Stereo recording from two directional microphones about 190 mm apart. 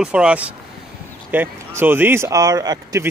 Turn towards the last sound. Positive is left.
turn(degrees=-20)  # may be behind; listen again after turning